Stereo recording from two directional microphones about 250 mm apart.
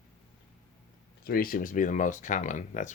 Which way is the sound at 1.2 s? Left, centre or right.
Left.